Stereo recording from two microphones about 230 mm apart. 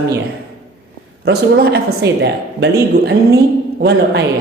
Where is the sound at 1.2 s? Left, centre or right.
Right.